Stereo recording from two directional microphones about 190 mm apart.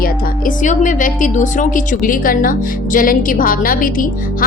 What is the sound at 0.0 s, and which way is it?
Speech, 45° left (ahead or behind).